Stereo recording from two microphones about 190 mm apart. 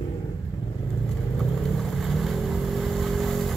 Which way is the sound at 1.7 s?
Centre (ahead or behind).